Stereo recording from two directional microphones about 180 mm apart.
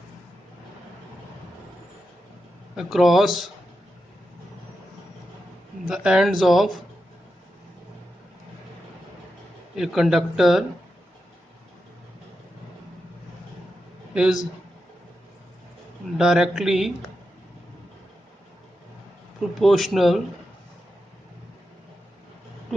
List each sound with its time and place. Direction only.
2.7 s speech: centre (ahead or behind)
5.9 s speech: 5° right (ahead or behind)
9.7 s speech: 5° right (ahead or behind)
14.1 s a man's voice: 5° right (ahead or behind)
16.1 s speech: 5° right (ahead or behind)
19.4 s speech: centre (ahead or behind)